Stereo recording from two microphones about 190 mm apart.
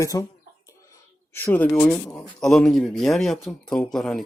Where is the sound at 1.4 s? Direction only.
10° left (ahead or behind).